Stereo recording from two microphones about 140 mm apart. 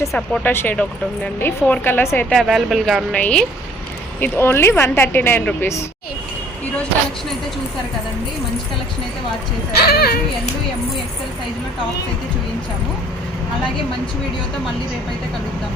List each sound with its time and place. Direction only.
0.4 s speech: 15° left (ahead or behind)
2.3 s speech: centre (ahead or behind); by 5.8 s 15° left (ahead or behind)
9.8 s a child's voice: 90° left